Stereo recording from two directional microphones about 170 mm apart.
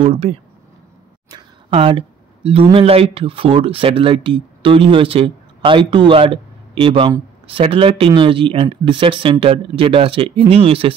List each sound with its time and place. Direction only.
0.0 s speech: 35° right (ahead or behind)